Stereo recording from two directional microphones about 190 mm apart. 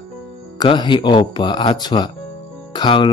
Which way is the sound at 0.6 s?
25° left (ahead or behind).